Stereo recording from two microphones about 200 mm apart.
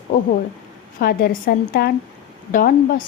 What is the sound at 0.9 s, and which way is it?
A woman's voice, 50° left (ahead or behind).